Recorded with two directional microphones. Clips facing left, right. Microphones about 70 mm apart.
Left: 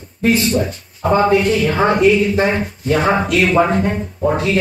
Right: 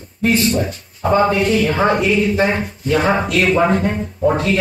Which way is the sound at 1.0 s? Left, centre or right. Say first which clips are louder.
Left 1 dB; centre.